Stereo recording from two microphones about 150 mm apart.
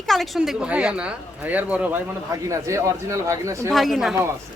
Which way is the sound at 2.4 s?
20° right (ahead or behind).